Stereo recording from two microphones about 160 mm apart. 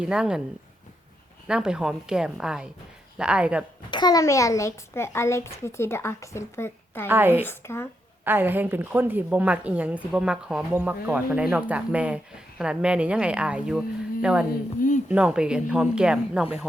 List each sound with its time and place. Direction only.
0.0 s speech: 5° right (ahead or behind)
1.5 s a woman's voice: 5° right (ahead or behind)
3.9 s a child's voice: 25° left (ahead or behind)
7.1 s a woman's voice: 10° right (ahead or behind)
7.4 s a child's voice: 15° left (ahead or behind)
8.2 s a woman's voice: 10° right (ahead or behind)
14.8 s a sound: 50° left (ahead or behind)
15.1 s speech: 5° right (ahead or behind)